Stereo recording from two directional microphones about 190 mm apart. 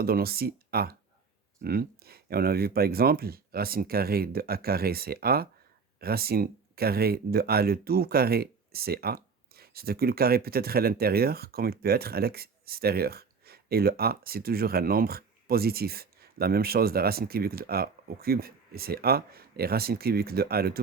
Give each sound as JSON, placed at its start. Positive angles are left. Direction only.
{"t": 0.0, "sound": "speech", "side_deg": -55}